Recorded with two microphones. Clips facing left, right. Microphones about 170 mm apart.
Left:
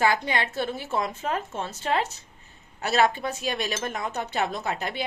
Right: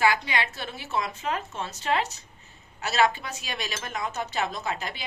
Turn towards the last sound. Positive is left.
turn(degrees=55)  # may be behind; listen again after turning